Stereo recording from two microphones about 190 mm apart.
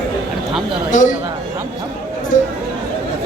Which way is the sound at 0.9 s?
40° left (ahead or behind).